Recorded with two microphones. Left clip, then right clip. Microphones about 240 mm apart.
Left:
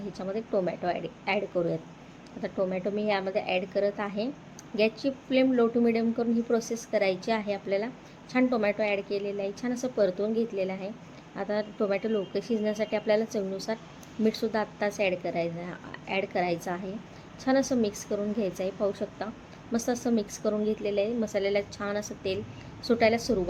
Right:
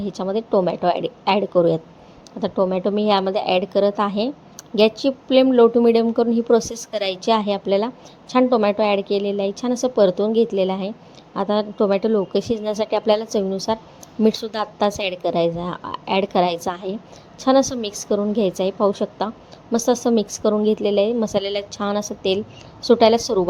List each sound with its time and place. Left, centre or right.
0.1 s a woman's voice: right